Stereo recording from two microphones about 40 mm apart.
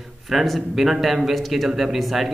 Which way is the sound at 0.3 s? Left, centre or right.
Centre.